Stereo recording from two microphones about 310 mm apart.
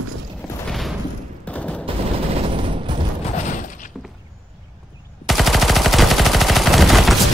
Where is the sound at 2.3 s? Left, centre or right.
Centre.